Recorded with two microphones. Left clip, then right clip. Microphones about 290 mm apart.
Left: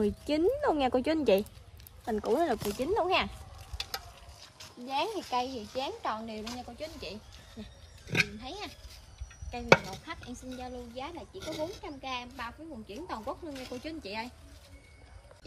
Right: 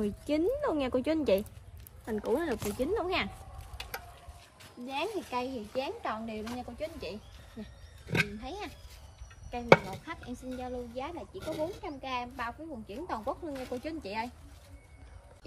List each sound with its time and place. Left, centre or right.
0.0 s speech: left
4.8 s speech: centre